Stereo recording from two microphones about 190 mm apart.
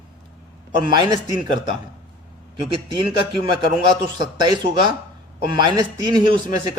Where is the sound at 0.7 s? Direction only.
25° right (ahead or behind).